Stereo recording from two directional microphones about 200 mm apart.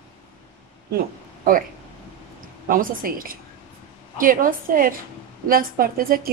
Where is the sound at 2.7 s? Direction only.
45° right (ahead or behind).